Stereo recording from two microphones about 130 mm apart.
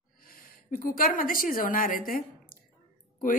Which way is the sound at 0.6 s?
90° left.